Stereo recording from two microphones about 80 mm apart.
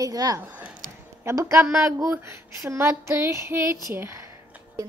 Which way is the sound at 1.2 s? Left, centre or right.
Right.